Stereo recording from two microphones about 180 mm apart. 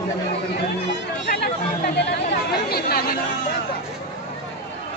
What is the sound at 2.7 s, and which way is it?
Speech, 60° left (ahead or behind).